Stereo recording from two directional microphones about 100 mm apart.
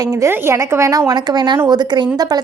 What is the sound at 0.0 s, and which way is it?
A woman's voice, 35° right (ahead or behind).